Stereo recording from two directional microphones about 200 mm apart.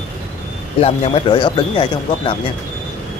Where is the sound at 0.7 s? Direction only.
30° left (ahead or behind).